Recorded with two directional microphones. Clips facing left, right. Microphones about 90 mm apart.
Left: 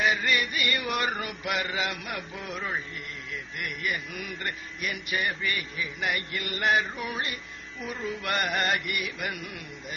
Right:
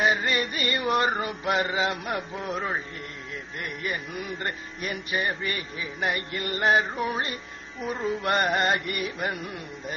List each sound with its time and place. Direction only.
0.0 s mantra: 30° right (ahead or behind)
3.5 s music: 30° right (ahead or behind)